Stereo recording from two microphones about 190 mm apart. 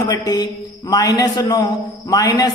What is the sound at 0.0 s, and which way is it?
Speech, 20° left (ahead or behind).